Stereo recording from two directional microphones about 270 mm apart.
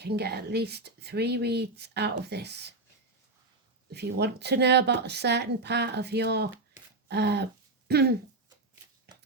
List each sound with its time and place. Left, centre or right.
0.0 s speech: right
3.9 s speech: right